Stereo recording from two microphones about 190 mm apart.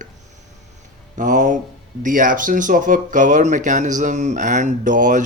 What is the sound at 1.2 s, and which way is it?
Speech, 40° right (ahead or behind).